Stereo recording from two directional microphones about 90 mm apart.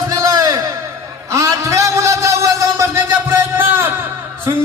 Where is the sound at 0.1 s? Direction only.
40° right (ahead or behind).